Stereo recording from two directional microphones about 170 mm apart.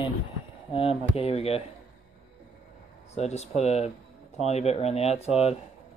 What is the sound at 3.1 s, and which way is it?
Speech, 40° left (ahead or behind).